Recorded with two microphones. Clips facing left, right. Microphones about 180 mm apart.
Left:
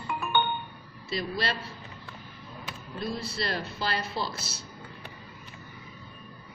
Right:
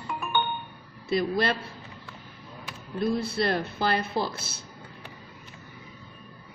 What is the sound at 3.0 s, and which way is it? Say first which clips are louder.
Speech: right 7 dB; 55° right (ahead or behind).